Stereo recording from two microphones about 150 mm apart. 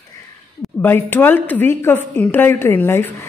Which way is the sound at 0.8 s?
15° left (ahead or behind).